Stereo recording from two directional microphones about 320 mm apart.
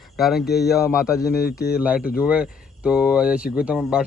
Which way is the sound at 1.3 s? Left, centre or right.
Left.